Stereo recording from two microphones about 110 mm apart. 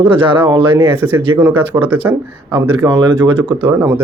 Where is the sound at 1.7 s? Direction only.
30° right (ahead or behind).